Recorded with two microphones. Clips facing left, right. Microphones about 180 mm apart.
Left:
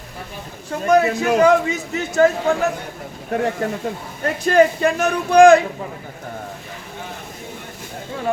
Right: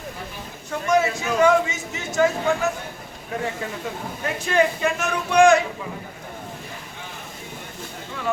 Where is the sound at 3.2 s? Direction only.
55° left (ahead or behind).